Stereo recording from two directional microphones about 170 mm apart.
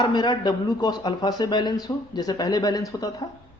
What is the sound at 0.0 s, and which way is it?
A man's voice, 25° left (ahead or behind).